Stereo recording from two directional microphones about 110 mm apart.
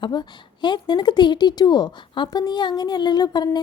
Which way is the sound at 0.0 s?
45° left (ahead or behind).